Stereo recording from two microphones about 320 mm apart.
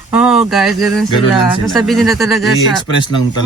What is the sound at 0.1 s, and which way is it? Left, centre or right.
Speech, centre.